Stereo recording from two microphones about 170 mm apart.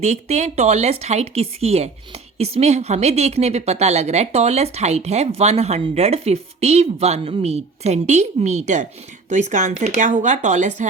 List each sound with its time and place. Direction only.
0.0 s a woman's voice: 40° right (ahead or behind)